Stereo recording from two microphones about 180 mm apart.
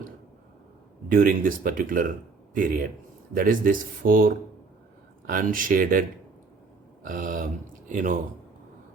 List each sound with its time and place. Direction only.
1.0 s speech: 50° right (ahead or behind)